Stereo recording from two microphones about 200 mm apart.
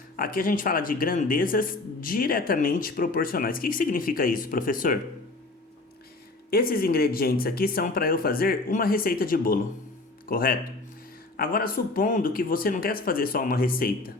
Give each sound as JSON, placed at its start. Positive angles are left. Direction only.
{"t": 0.2, "sound": "a man's voice", "side_deg": 45}
{"t": 6.5, "sound": "a man's voice", "side_deg": 50}